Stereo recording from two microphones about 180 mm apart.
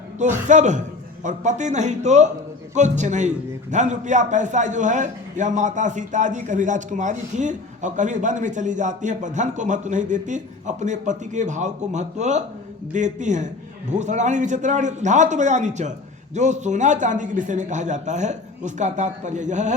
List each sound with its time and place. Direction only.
0.2 s a man's voice: 45° right (ahead or behind)